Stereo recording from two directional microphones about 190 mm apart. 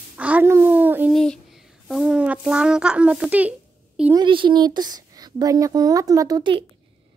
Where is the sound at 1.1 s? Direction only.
5° left (ahead or behind).